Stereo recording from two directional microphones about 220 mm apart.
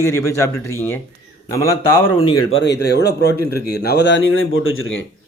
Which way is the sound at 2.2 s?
20° left (ahead or behind).